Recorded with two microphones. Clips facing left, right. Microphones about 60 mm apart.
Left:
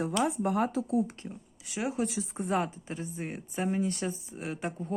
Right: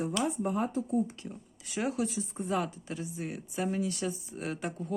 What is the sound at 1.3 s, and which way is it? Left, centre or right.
Speech, centre.